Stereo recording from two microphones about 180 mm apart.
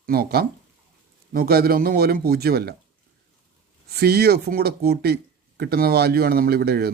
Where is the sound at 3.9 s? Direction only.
60° right (ahead or behind).